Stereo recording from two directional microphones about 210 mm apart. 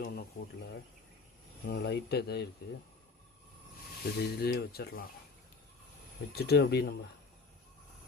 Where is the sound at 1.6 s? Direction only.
50° left (ahead or behind).